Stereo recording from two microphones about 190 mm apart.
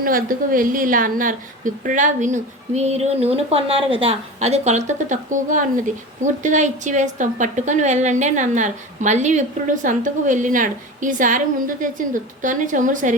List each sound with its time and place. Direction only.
0.0 s a woman's voice: 50° right (ahead or behind)